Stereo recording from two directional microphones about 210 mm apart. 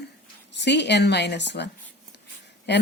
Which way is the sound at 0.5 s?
55° left (ahead or behind).